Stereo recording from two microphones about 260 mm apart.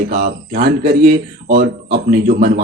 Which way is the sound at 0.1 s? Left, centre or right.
Right.